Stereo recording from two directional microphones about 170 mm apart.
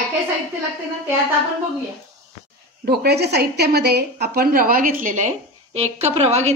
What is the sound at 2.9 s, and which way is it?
A woman's voice, 75° right (ahead or behind).